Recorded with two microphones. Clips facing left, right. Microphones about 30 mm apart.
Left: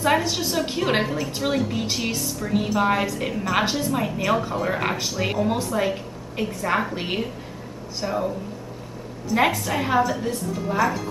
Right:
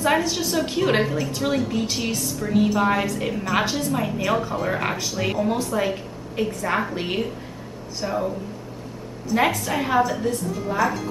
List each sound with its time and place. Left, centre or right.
0.2 s a woman's voice: centre
9.3 s a woman's voice: centre